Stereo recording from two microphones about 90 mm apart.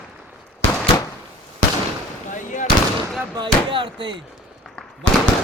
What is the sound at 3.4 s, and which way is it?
Speech, 65° right (ahead or behind).